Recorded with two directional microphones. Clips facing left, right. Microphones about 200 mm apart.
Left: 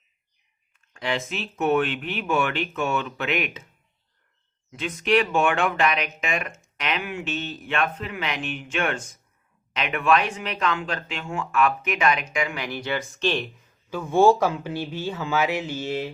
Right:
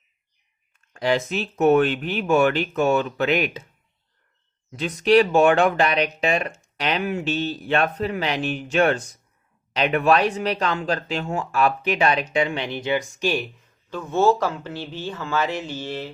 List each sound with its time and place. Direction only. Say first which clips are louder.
0.9 s speech: right 6 dB; 40° right (ahead or behind)
4.8 s speech: right 5 dB; 35° right (ahead or behind); by 13.7 s 5° right (ahead or behind)
13.9 s speech: left 2 dB; 10° left (ahead or behind)